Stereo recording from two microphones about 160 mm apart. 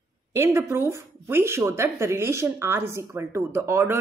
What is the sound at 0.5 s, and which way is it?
A woman's voice, 15° right (ahead or behind).